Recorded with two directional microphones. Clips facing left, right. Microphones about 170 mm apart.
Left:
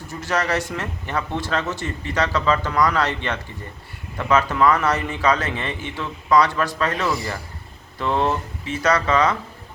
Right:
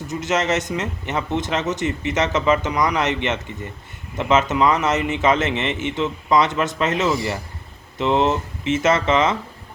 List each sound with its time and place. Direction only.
0.1 s speech: 20° right (ahead or behind)